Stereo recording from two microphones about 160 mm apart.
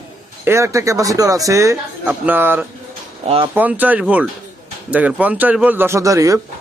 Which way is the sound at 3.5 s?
10° right (ahead or behind).